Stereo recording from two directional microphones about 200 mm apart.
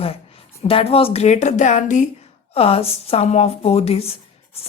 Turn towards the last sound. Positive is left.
turn(degrees=30)  # may be behind; listen again after turning